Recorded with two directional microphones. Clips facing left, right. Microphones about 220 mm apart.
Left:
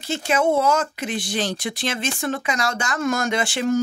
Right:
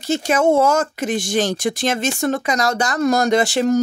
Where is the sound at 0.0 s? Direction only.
40° right (ahead or behind).